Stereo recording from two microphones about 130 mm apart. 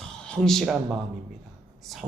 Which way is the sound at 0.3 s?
5° left (ahead or behind).